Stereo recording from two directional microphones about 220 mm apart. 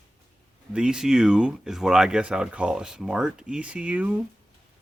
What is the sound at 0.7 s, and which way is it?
Speech, 5° right (ahead or behind).